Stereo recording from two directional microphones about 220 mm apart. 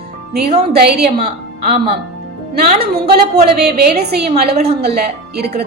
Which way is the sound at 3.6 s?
45° right (ahead or behind).